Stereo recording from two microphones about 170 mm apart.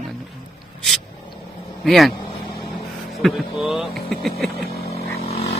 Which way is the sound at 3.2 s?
Centre (ahead or behind).